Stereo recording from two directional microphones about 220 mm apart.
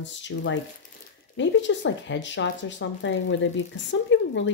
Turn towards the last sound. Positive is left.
turn(degrees=55)  # may be behind; listen again after turning